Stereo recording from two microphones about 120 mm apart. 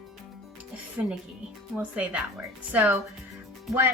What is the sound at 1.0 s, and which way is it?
A woman's voice, 20° right (ahead or behind).